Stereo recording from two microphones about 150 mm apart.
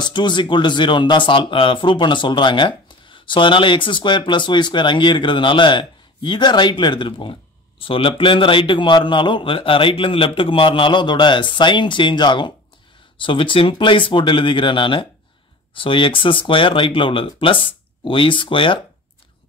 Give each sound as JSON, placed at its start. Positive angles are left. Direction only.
{"t": 0.0, "sound": "speech", "side_deg": 30}